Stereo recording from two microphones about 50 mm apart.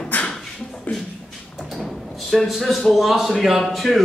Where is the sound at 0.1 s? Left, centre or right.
Left.